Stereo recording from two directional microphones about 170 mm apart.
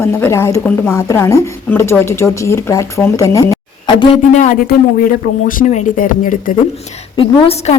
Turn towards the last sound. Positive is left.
turn(degrees=35)  # may be behind; listen again after turning